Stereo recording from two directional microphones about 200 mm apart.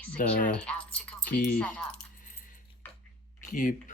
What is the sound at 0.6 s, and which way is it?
Speech, 5° left (ahead or behind).